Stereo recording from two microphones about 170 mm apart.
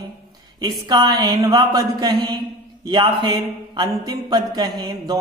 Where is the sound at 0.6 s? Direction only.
25° right (ahead or behind).